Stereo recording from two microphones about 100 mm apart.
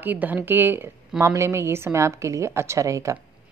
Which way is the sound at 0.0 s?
15° right (ahead or behind).